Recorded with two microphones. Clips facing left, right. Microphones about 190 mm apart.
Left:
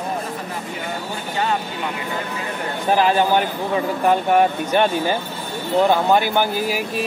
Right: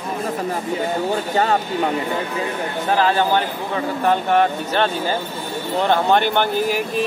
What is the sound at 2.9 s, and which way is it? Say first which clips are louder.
Speech: left 1 dB; 15° left (ahead or behind).